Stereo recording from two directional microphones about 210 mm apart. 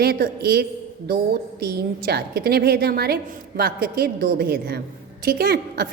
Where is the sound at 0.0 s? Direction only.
50° right (ahead or behind).